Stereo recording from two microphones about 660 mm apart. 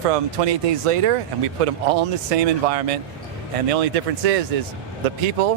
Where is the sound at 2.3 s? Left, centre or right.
Right.